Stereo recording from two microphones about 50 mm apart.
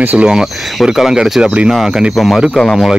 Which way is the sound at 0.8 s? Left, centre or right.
Centre.